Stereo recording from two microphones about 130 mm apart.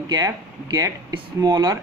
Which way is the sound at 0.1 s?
30° right (ahead or behind).